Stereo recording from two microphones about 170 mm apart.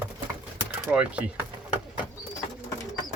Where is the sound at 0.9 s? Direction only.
5° right (ahead or behind).